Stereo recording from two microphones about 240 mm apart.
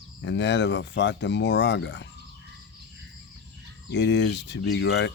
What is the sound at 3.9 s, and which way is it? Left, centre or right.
Speech, left.